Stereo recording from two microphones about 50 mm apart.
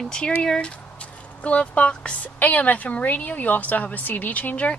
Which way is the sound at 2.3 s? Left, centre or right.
Left.